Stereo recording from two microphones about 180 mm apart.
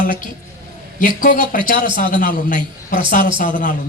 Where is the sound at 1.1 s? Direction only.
50° left (ahead or behind).